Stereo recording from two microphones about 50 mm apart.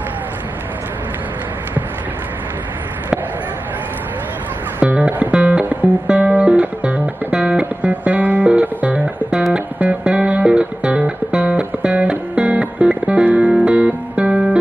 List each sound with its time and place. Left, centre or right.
4.8 s music: right